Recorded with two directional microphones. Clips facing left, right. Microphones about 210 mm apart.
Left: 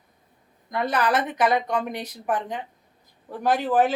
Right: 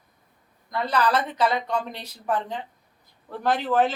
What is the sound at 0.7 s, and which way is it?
Speech, 20° left (ahead or behind).